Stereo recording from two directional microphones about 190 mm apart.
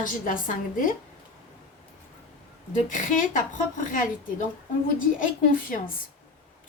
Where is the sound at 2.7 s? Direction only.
45° left (ahead or behind).